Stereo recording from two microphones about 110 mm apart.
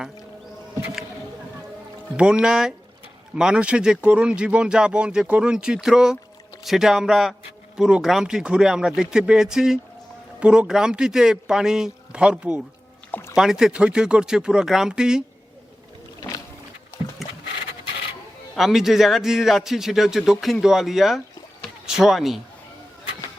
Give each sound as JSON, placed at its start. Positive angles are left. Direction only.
{"t": 2.1, "sound": "a man's voice", "side_deg": -10}
{"t": 13.1, "sound": "a sound", "side_deg": 20}
{"t": 13.3, "sound": "a man's voice", "side_deg": -5}
{"t": 17.2, "sound": "goat", "side_deg": 0}
{"t": 18.5, "sound": "a man's voice", "side_deg": -5}